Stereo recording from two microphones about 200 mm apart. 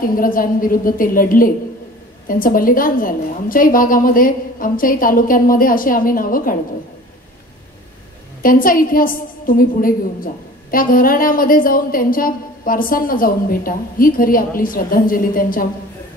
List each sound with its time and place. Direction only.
0.2 s a woman's voice: 45° left (ahead or behind)
8.4 s a woman's voice: 45° left (ahead or behind)